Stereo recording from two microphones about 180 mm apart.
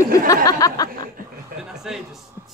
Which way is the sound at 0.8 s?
55° right (ahead or behind).